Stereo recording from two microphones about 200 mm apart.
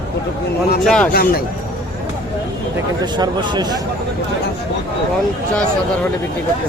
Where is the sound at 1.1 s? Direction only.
50° left (ahead or behind).